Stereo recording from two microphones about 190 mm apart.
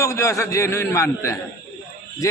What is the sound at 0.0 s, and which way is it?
A man's voice, 15° left (ahead or behind).